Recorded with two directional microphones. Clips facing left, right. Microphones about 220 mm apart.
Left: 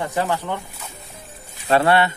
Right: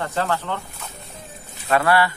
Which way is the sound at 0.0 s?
15° left (ahead or behind).